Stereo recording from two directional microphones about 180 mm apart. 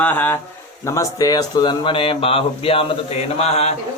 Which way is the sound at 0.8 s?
15° left (ahead or behind).